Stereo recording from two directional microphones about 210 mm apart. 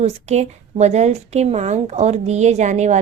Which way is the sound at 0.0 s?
30° right (ahead or behind).